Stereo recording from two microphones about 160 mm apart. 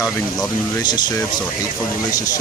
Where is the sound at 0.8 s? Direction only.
25° left (ahead or behind).